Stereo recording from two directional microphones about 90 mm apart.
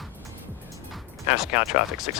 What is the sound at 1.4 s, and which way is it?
Speech, 5° right (ahead or behind).